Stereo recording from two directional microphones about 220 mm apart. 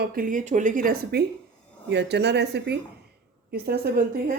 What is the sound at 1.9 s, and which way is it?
Speech, 50° right (ahead or behind).